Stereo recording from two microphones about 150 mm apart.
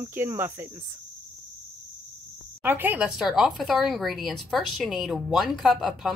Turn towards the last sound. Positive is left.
turn(degrees=0)  # may be behind; listen again after turning